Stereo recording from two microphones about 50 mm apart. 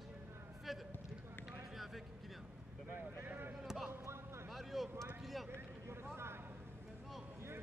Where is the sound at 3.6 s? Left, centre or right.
Centre.